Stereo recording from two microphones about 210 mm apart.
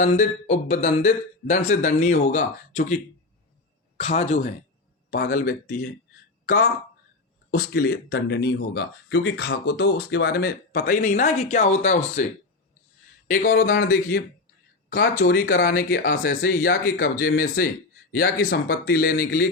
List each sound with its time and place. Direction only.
0.0 s speech: 35° left (ahead or behind)
5.1 s speech: 40° left (ahead or behind)
6.4 s a sound: 40° left (ahead or behind)
7.5 s speech: 50° left (ahead or behind)